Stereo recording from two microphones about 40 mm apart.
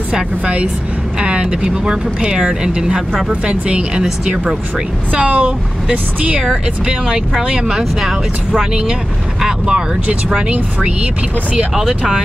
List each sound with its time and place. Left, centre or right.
0.1 s speech: right
3.3 s speech: right
3.9 s speech: centre
5.1 s speech: right
7.5 s speech: centre
9.7 s speech: right
11.7 s speech: centre